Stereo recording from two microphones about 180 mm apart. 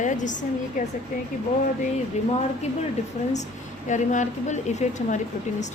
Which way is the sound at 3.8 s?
45° left (ahead or behind).